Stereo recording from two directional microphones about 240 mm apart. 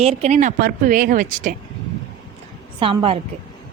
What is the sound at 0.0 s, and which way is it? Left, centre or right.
A woman's voice, right.